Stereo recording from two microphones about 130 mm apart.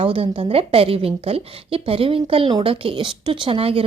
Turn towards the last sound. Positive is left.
turn(degrees=-45)  # may be behind; listen again after turning